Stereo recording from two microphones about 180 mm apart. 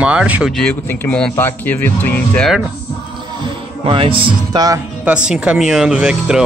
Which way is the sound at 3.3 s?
25° right (ahead or behind).